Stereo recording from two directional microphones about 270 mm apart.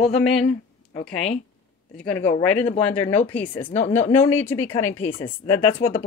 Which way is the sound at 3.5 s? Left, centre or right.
Left.